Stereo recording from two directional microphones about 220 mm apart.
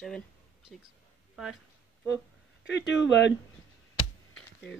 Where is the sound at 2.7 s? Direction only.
55° left (ahead or behind).